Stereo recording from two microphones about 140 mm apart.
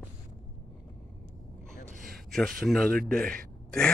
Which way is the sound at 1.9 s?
90° right.